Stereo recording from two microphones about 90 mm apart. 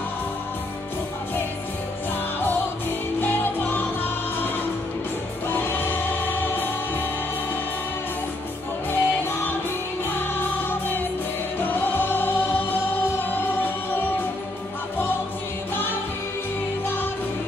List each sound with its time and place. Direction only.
3.2 s music: 20° left (ahead or behind)
5.5 s music: 25° left (ahead or behind)
8.9 s music: 25° left (ahead or behind)
15.7 s music: 25° left (ahead or behind)